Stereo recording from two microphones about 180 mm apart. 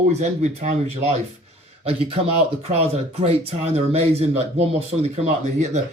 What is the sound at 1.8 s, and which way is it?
Speech, 30° right (ahead or behind).